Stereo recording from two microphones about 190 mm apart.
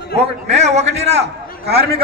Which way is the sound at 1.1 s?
60° right (ahead or behind).